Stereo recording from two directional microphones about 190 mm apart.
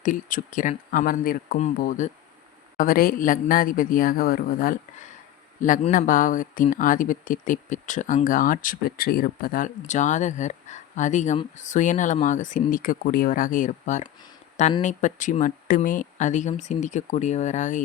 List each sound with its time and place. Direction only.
0.0 s speech: 45° left (ahead or behind)